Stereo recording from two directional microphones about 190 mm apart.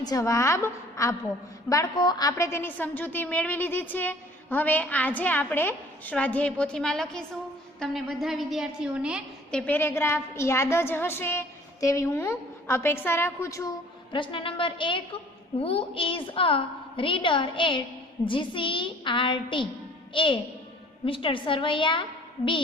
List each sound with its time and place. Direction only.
0.0 s a woman's voice: 20° left (ahead or behind)
14.1 s a woman's voice: 25° left (ahead or behind)